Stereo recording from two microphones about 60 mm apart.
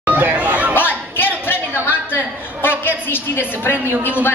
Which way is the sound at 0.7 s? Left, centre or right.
Left.